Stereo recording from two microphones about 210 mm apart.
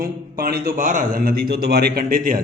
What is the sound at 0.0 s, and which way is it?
Speech, 45° right (ahead or behind).